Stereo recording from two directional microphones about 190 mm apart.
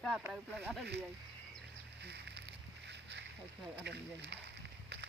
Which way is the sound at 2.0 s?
65° right (ahead or behind).